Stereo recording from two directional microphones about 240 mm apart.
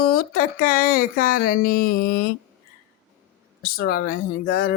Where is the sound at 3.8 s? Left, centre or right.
Left.